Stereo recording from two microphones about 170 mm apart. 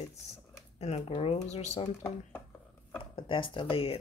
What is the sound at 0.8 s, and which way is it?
Speech, 35° left (ahead or behind).